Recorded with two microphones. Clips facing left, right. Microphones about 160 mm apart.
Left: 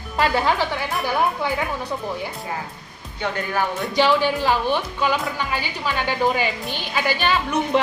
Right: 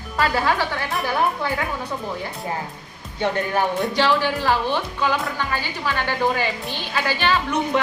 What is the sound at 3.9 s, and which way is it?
Speech, 15° left (ahead or behind).